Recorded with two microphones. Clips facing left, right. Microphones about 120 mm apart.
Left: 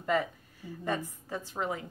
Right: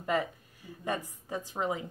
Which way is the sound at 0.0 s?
15° right (ahead or behind).